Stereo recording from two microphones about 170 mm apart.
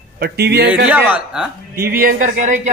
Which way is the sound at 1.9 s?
60° right (ahead or behind).